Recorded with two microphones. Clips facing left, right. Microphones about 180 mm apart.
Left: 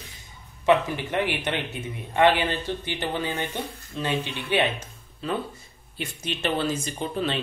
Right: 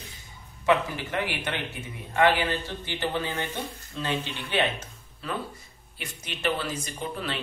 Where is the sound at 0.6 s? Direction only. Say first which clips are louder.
Left 3 dB; 20° left (ahead or behind).